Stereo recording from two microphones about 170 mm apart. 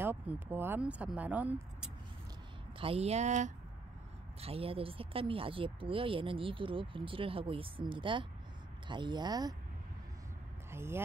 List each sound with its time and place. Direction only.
0.0 s speech: 10° right (ahead or behind)
2.8 s speech: 35° right (ahead or behind)
4.4 s speech: 35° right (ahead or behind)
10.7 s speech: 15° right (ahead or behind)